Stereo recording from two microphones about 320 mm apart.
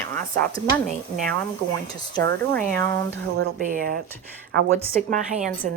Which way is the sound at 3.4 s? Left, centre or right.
Right.